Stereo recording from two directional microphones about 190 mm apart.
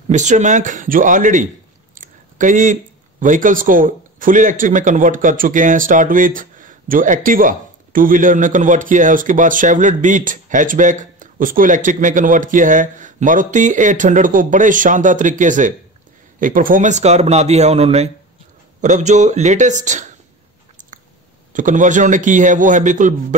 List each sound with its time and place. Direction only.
0.1 s a man's voice: 40° right (ahead or behind)
21.5 s a man's voice: 40° right (ahead or behind)